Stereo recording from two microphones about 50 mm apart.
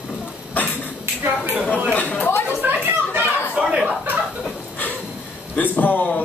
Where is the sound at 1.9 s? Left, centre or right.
Left.